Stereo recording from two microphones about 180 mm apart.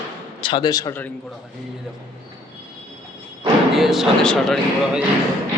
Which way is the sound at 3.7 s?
Centre (ahead or behind).